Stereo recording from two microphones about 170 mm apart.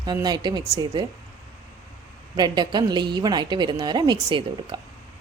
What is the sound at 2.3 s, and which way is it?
A woman's voice, 25° right (ahead or behind).